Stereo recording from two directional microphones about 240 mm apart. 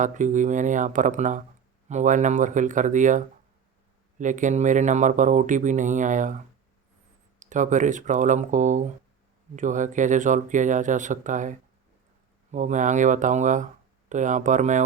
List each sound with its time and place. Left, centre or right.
0.0 s speech: right
7.3 s speech: right